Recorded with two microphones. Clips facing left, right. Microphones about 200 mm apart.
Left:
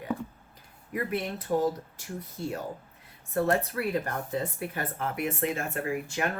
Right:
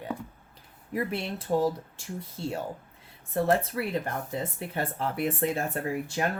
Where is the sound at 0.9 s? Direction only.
30° right (ahead or behind).